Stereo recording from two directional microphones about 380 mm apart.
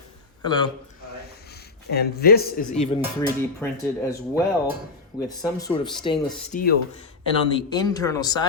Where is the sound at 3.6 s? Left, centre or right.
Centre.